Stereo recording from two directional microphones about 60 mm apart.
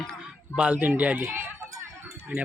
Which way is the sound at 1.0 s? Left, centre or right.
Right.